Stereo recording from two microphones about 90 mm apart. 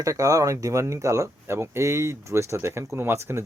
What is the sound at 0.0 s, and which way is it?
Speech, 40° right (ahead or behind).